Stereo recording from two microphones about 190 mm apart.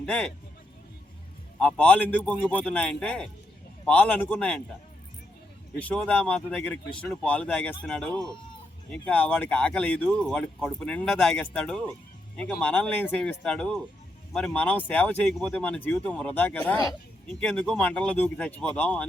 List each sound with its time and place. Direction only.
0.0 s speech: 5° left (ahead or behind)
1.5 s speech: 5° left (ahead or behind)
5.8 s speech: 5° left (ahead or behind)